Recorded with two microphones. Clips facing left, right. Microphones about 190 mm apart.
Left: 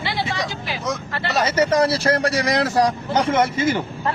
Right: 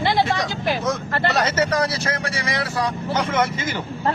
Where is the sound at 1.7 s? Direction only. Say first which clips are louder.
Left 5 dB; 25° left (ahead or behind).